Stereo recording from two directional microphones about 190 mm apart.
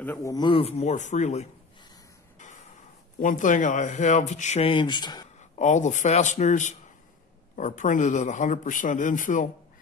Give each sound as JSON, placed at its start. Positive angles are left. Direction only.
{"t": 0.0, "sound": "speech", "side_deg": 15}
{"t": 2.3, "sound": "a sound", "side_deg": 40}
{"t": 3.2, "sound": "speech", "side_deg": 45}
{"t": 5.4, "sound": "speech", "side_deg": 40}